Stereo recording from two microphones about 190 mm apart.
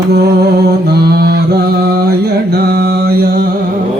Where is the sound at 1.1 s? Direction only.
55° right (ahead or behind).